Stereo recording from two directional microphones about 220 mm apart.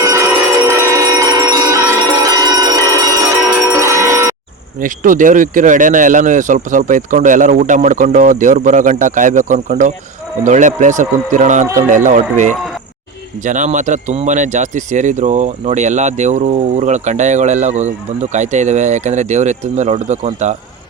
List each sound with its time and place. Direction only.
0.0 s bell: 15° right (ahead or behind)
3.7 s cowbell: 15° right (ahead or behind)
4.8 s speech: 35° right (ahead or behind)